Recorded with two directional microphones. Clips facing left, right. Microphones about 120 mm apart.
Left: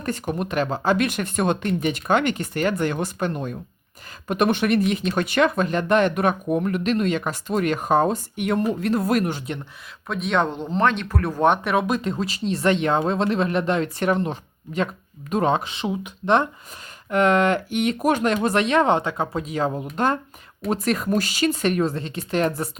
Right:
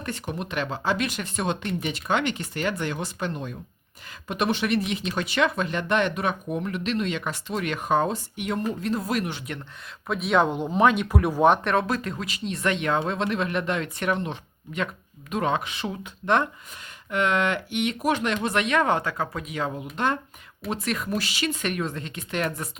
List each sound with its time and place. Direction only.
0.0 s speech: 45° left (ahead or behind)
10.1 s speech: 5° right (ahead or behind)
11.4 s speech: centre (ahead or behind)
11.9 s speech: 20° left (ahead or behind)
17.1 s speech: 45° left (ahead or behind)